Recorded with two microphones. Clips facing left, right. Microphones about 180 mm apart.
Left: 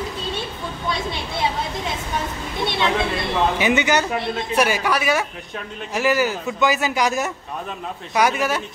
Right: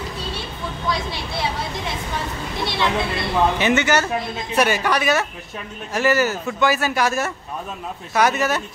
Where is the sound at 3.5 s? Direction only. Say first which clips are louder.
Even; 15° left (ahead or behind).